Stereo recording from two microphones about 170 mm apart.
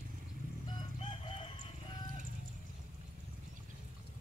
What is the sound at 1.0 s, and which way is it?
Chicken, 30° left (ahead or behind).